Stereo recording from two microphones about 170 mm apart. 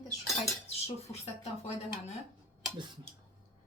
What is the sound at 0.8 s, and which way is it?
Speech, 40° left (ahead or behind).